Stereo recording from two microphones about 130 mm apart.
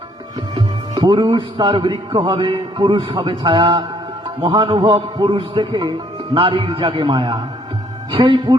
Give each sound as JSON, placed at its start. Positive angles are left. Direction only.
{"t": 0.5, "sound": "a man's voice", "side_deg": -35}